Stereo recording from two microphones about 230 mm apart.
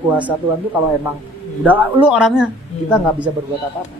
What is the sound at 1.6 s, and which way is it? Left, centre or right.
Speech, centre.